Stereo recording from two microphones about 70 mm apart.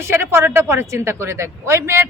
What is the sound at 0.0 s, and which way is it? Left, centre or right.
Speech, right.